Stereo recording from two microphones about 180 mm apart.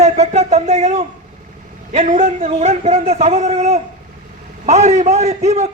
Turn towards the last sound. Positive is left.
turn(degrees=-35)  # may be behind; listen again after turning